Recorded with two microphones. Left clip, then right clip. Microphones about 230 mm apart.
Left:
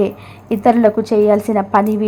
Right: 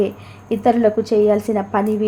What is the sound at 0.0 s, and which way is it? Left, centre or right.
A woman's voice, centre.